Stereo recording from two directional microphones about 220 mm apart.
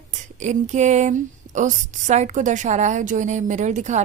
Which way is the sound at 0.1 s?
35° right (ahead or behind).